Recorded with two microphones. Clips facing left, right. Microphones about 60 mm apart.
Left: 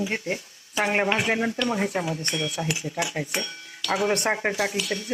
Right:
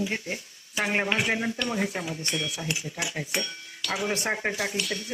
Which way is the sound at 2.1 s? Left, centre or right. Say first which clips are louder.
Left 3 dB; left.